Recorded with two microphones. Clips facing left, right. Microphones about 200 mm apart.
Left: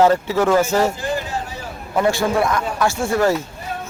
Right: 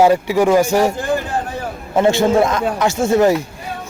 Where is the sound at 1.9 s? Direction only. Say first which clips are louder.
Right 5 dB; 25° right (ahead or behind).